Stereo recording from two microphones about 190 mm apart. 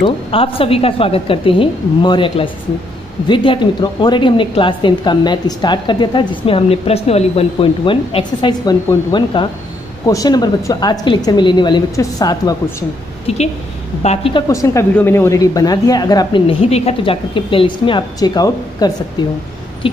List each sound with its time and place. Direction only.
0.0 s a woman's voice: 30° left (ahead or behind)
14.0 s a woman's voice: 30° left (ahead or behind)
14.5 s a woman's voice: 15° left (ahead or behind)